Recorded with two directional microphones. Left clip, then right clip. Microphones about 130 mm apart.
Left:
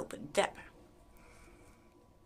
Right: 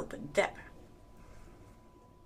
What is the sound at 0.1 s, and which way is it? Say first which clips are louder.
Speech: right 2 dB; 20° left (ahead or behind).